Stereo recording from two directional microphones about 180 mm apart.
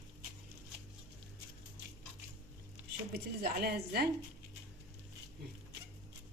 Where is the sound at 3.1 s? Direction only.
60° right (ahead or behind).